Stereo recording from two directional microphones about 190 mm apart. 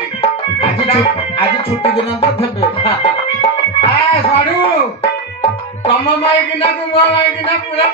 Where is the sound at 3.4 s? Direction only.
30° left (ahead or behind).